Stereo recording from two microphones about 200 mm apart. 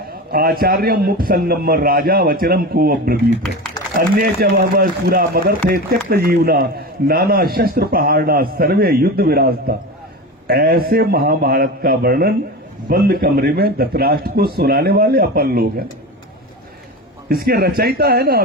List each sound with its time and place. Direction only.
0.3 s a man's voice: 50° right (ahead or behind)
17.2 s a man's voice: 50° right (ahead or behind)